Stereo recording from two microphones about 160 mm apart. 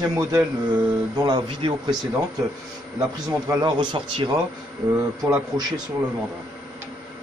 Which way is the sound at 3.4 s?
30° right (ahead or behind).